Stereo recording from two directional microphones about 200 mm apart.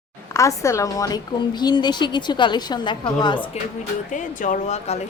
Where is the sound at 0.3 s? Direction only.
15° left (ahead or behind).